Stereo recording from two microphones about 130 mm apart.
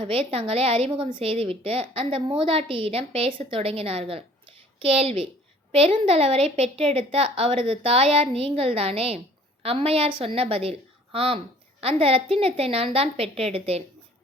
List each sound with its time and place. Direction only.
0.0 s a woman's voice: 45° right (ahead or behind)